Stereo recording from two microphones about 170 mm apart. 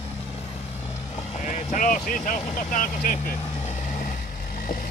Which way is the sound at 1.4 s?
50° left (ahead or behind).